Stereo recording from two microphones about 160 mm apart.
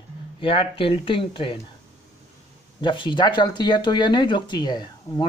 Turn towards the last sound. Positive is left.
turn(degrees=25)  # may be behind; listen again after turning